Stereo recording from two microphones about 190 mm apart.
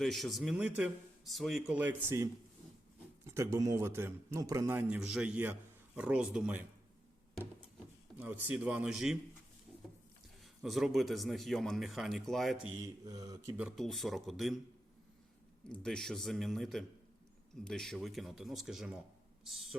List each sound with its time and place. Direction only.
0.0 s a man's voice: centre (ahead or behind)
8.2 s a man's voice: 10° right (ahead or behind)
10.4 s speech: centre (ahead or behind)
13.1 s speech: 20° right (ahead or behind)
13.6 s speech: centre (ahead or behind)
15.7 s speech: 5° left (ahead or behind)